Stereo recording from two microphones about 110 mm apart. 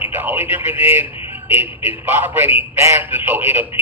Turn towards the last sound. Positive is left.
turn(degrees=-20)  # may be behind; listen again after turning